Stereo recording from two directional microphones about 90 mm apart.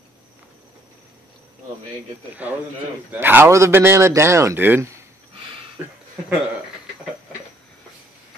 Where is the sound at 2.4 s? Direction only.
15° right (ahead or behind).